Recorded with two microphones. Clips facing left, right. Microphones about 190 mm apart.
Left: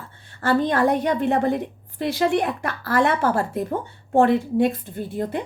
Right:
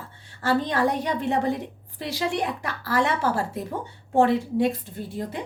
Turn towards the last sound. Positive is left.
turn(degrees=55)  # may be behind; listen again after turning